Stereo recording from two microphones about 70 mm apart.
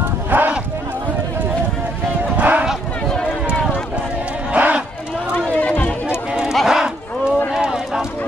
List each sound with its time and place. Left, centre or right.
0.3 s clip-clop: right
2.3 s a sound: right
3.1 s run: centre
4.5 s a sound: right
5.6 s music: left
6.3 s run: centre